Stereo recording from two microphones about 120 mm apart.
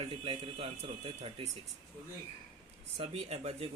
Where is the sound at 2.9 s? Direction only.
60° right (ahead or behind).